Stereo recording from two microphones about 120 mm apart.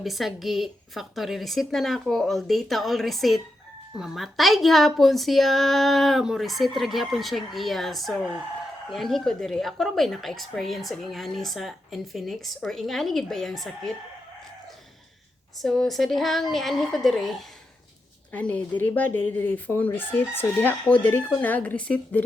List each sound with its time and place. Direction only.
0.0 s a woman's voice: centre (ahead or behind)
15.6 s a woman's voice: centre (ahead or behind)
18.3 s speech: 10° left (ahead or behind)